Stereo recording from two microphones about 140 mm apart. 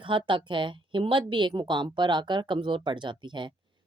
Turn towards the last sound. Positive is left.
turn(degrees=-35)  # may be behind; listen again after turning